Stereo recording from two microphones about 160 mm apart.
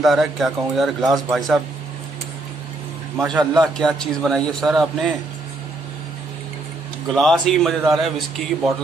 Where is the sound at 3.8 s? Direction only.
5° left (ahead or behind).